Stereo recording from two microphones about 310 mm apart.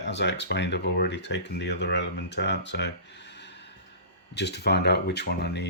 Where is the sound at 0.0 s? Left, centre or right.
Left.